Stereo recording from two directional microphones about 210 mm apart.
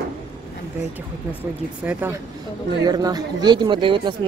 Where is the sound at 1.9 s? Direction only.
10° right (ahead or behind).